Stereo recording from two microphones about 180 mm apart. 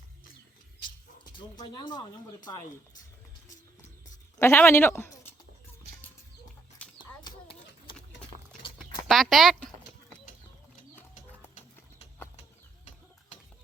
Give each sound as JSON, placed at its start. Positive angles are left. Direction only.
{"t": 1.2, "sound": "speech", "side_deg": 25}
{"t": 4.4, "sound": "speech", "side_deg": 15}
{"t": 7.3, "sound": "clip-clop", "side_deg": 30}
{"t": 9.0, "sound": "a sound", "side_deg": 0}